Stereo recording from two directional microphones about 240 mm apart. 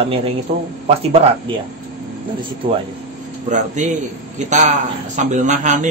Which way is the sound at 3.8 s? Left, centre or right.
Right.